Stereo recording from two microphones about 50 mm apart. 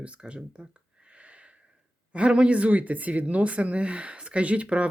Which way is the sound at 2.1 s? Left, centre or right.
Right.